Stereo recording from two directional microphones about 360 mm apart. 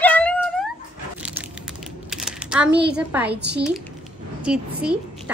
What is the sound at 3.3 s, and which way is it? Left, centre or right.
Speech, right.